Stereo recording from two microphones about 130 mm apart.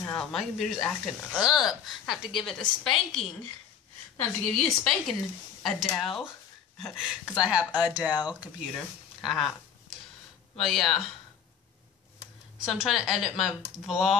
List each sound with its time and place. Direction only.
0.1 s speech: 5° left (ahead or behind)
4.2 s speech: 5° left (ahead or behind); by 8.1 s 10° right (ahead or behind)
8.1 s speech: 35° left (ahead or behind)
8.7 s speech: centre (ahead or behind)
10.6 s speech: 5° left (ahead or behind)
12.5 s speech: 5° right (ahead or behind)